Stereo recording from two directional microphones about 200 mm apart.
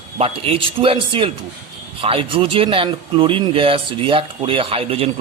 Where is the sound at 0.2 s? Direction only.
30° right (ahead or behind).